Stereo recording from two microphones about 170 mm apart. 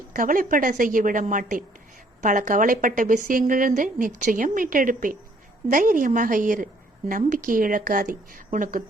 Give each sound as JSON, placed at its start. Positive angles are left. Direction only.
{"t": 0.1, "sound": "a woman's voice", "side_deg": -55}